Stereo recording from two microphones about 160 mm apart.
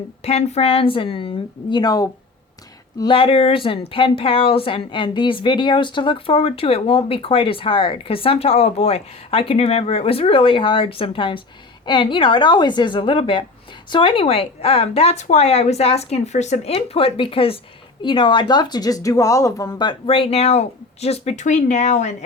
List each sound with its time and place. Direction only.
0.2 s a woman's voice: 40° left (ahead or behind)